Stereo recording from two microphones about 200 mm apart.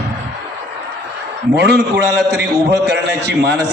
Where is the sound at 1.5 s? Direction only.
55° right (ahead or behind).